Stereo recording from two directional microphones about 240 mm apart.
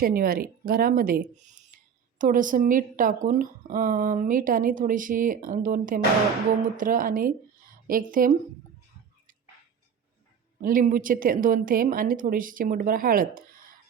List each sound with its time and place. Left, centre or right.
0.0 s speech: right
10.6 s speech: right